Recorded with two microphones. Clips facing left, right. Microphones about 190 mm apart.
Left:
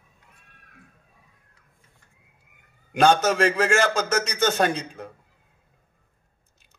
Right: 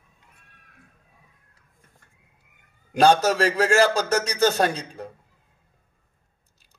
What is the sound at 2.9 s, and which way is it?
A man's voice, 35° right (ahead or behind).